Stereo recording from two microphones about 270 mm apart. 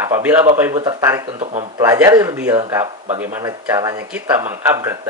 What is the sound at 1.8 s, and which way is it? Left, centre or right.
Speech, centre.